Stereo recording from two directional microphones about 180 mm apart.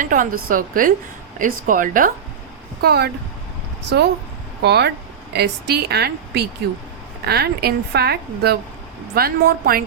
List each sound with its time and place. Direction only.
0.0 s a woman's voice: 50° right (ahead or behind)
2.8 s a woman's voice: 60° right (ahead or behind)